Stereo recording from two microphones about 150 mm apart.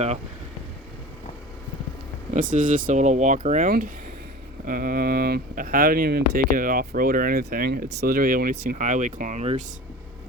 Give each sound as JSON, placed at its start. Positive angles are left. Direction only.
{"t": 2.3, "sound": "speech", "side_deg": -60}